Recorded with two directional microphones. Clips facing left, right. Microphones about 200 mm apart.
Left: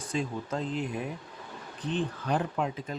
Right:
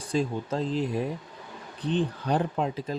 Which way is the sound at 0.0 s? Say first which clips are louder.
Right 5 dB; 35° right (ahead or behind).